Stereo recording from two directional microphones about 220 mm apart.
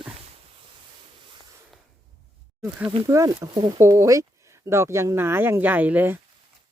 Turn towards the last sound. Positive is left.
turn(degrees=-10)  # may be behind; listen again after turning